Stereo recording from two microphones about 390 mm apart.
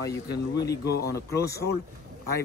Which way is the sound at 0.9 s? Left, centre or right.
Left.